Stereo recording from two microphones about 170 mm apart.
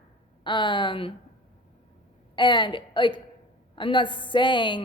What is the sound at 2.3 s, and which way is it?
Speech, 25° left (ahead or behind).